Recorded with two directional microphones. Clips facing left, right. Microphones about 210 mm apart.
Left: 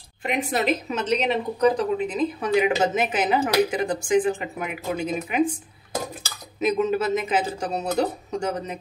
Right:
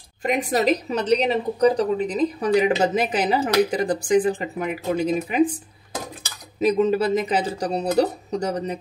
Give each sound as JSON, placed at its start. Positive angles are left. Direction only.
{"t": 0.2, "sound": "a woman's voice", "side_deg": -40}
{"t": 6.6, "sound": "a woman's voice", "side_deg": -35}